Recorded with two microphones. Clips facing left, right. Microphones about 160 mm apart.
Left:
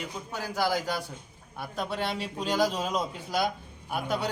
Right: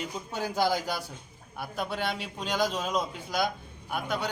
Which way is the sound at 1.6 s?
Centre (ahead or behind).